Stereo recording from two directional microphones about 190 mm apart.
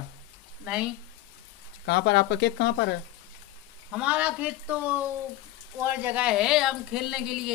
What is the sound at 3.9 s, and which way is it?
Speech, 5° right (ahead or behind).